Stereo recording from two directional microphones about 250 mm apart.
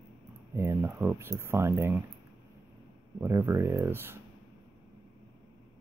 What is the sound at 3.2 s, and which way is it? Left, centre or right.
Speech, centre.